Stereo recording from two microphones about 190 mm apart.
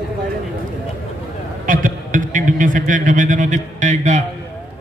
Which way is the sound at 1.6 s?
45° right (ahead or behind).